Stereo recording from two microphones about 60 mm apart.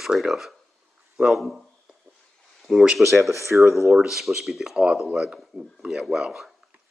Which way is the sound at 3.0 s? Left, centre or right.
Right.